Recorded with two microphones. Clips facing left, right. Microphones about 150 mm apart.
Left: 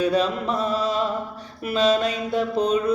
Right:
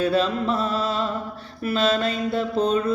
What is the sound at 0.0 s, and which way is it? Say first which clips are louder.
Mantra: even; 15° left (ahead or behind).